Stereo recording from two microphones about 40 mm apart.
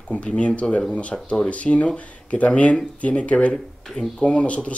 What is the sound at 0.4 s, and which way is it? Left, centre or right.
Speech, left.